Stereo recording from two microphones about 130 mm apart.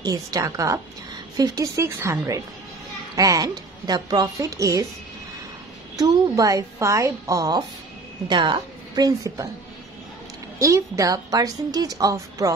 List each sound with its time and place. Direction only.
0.0 s a woman's voice: 25° right (ahead or behind)
5.9 s a woman's voice: 30° right (ahead or behind)
10.6 s a woman's voice: 25° right (ahead or behind)